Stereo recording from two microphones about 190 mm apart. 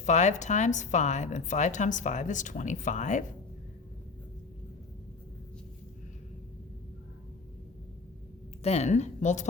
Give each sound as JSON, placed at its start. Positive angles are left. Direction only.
{"t": 0.0, "sound": "a woman's voice", "side_deg": 40}
{"t": 8.6, "sound": "a woman's voice", "side_deg": 35}